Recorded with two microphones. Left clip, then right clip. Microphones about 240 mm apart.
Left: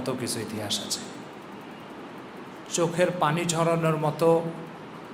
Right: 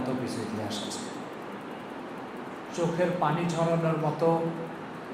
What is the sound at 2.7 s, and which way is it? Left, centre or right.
A man's voice, left.